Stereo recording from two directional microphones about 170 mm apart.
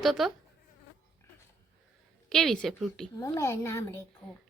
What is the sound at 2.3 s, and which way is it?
Speech, centre (ahead or behind).